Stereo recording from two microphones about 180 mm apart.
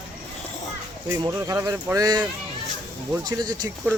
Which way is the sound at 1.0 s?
15° right (ahead or behind).